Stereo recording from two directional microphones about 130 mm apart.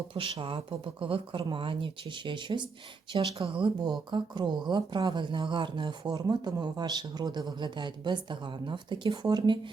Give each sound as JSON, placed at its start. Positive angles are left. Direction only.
{"t": 0.1, "sound": "speech", "side_deg": -45}